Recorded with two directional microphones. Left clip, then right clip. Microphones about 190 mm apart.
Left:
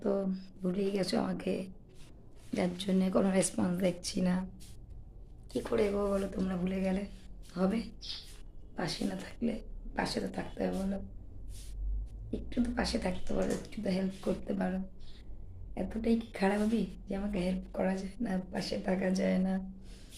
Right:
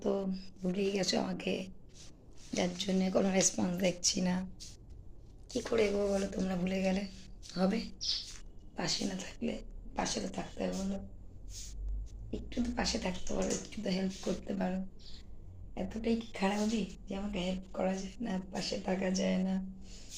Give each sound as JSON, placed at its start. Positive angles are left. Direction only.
{"t": 0.0, "sound": "speech", "side_deg": 10}
{"t": 5.5, "sound": "speech", "side_deg": 10}
{"t": 6.1, "sound": "speech", "side_deg": 0}
{"t": 12.3, "sound": "speech", "side_deg": 10}
{"t": 15.7, "sound": "speech", "side_deg": 10}